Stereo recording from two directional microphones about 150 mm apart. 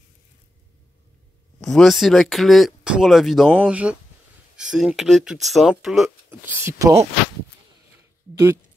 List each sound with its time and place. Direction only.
1.6 s speech: 5° left (ahead or behind)
6.4 s speech: 15° right (ahead or behind)